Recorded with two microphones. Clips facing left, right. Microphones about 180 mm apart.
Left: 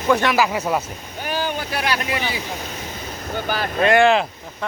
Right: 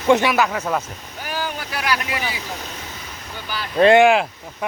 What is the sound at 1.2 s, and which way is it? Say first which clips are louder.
Speech: left 3 dB; 25° left (ahead or behind).